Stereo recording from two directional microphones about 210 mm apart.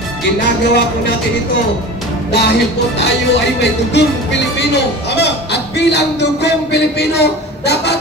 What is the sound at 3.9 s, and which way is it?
Speech, 55° left (ahead or behind).